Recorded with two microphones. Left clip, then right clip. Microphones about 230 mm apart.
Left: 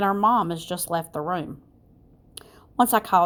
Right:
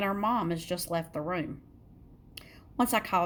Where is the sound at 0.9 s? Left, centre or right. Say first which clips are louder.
Left 8 dB; centre.